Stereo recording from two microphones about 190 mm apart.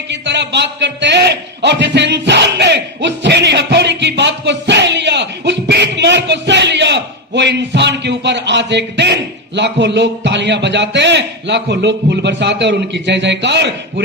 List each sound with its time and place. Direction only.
0.1 s a man's voice: 65° right (ahead or behind)